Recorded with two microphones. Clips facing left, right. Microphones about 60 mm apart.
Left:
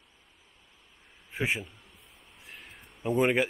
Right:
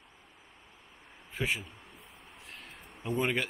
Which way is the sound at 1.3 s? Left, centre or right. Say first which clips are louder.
Left 3 dB; centre.